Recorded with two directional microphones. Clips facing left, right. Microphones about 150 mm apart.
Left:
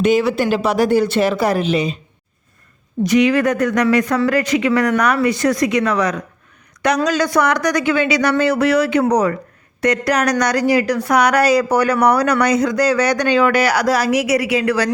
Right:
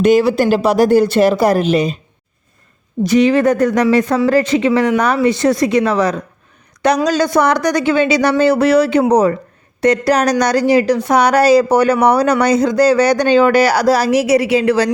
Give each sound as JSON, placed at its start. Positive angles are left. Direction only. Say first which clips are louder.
{"t": 0.0, "sound": "speech", "louder": "right 4 dB", "side_deg": -40}
{"t": 3.0, "sound": "speech", "louder": "right 3 dB", "side_deg": -30}